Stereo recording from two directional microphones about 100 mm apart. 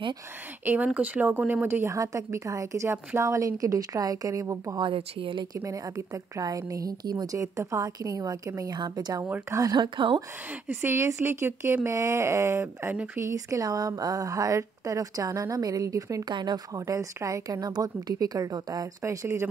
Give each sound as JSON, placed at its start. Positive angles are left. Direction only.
{"t": 0.7, "sound": "a woman's voice", "side_deg": -15}
{"t": 4.7, "sound": "a woman's voice", "side_deg": -60}
{"t": 5.6, "sound": "a woman's voice", "side_deg": -30}
{"t": 9.2, "sound": "speech", "side_deg": -20}
{"t": 9.6, "sound": "a woman's voice", "side_deg": -45}
{"t": 10.7, "sound": "speech", "side_deg": -25}
{"t": 13.2, "sound": "a woman's voice", "side_deg": -30}
{"t": 16.3, "sound": "a woman's voice", "side_deg": -45}